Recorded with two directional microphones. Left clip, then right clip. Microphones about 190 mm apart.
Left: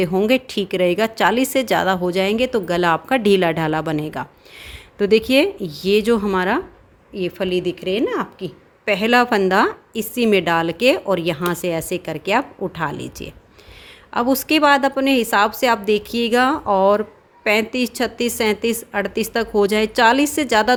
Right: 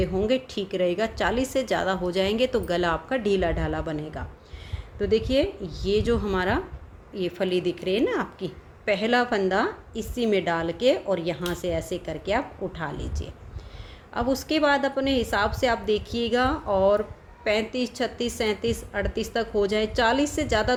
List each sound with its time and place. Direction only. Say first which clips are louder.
0.0 s a woman's voice: left 7 dB; 45° left (ahead or behind)